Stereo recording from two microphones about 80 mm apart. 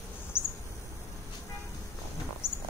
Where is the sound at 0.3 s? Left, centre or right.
Left.